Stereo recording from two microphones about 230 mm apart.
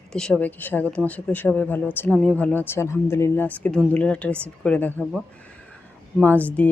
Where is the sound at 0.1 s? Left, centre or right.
Centre.